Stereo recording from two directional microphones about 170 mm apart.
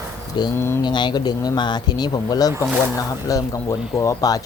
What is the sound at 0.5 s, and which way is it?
Speech, 15° left (ahead or behind).